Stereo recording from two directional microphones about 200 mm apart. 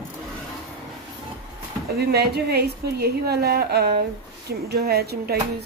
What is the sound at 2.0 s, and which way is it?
A woman's voice, 55° right (ahead or behind).